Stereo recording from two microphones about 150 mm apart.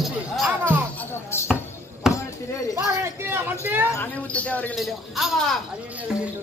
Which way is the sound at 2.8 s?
15° right (ahead or behind).